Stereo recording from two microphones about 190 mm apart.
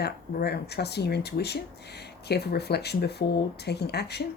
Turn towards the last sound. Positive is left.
turn(degrees=60)  # may be behind; listen again after turning